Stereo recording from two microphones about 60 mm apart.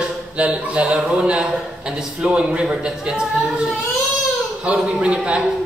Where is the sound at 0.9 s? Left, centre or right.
Centre.